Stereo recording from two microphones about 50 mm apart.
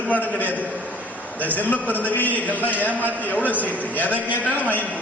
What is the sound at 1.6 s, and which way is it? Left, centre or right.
A man's voice, left.